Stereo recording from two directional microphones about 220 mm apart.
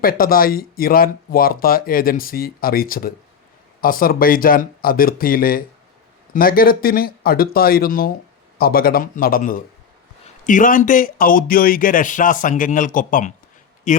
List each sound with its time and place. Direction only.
0.0 s speech: 40° left (ahead or behind)